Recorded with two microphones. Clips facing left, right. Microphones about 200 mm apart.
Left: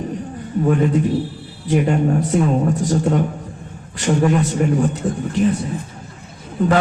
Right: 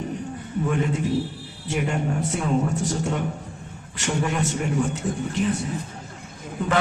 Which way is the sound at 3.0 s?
40° left (ahead or behind).